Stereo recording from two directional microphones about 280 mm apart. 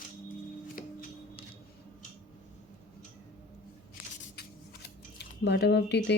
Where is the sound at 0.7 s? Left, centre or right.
Left.